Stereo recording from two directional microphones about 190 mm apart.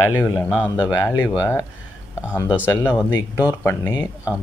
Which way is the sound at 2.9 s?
15° left (ahead or behind).